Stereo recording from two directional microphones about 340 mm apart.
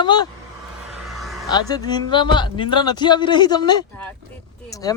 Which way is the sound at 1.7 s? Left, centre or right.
Centre.